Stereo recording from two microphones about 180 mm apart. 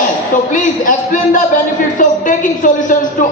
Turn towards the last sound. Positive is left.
turn(degrees=45)  # may be behind; listen again after turning